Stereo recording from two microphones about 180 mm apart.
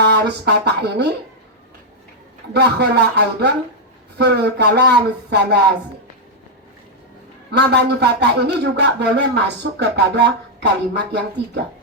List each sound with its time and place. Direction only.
0.0 s speech: 70° right (ahead or behind)
2.5 s speech: 65° right (ahead or behind)
7.5 s speech: 70° right (ahead or behind)